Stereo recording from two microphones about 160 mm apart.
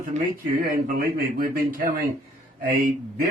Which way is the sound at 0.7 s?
65° right (ahead or behind).